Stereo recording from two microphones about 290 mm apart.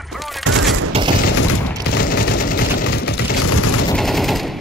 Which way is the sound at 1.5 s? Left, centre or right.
Left.